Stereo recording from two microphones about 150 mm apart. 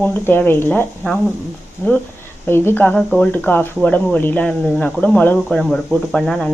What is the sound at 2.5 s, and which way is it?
Speech, 15° left (ahead or behind).